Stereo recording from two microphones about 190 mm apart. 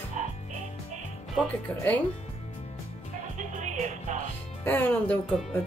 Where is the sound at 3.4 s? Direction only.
40° right (ahead or behind).